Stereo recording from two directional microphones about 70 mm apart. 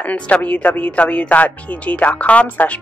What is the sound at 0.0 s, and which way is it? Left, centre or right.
Speech, centre.